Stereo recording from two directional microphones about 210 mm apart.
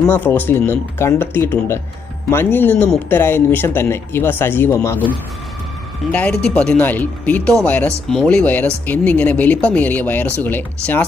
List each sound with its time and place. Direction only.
0.0 s speech: 10° left (ahead or behind)
6.1 s speech: 5° left (ahead or behind)